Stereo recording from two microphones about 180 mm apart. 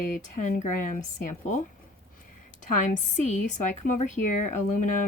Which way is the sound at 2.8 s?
45° left (ahead or behind).